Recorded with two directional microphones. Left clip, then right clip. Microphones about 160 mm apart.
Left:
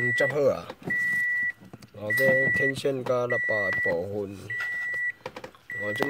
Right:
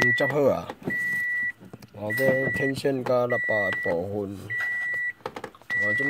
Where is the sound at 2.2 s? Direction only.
5° right (ahead or behind).